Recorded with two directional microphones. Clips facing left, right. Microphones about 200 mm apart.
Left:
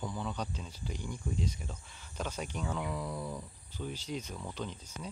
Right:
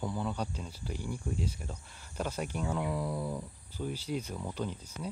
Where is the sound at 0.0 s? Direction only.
10° right (ahead or behind).